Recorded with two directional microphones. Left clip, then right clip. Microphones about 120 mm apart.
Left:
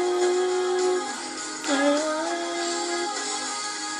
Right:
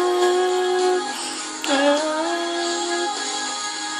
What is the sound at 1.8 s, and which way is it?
Music, 45° right (ahead or behind).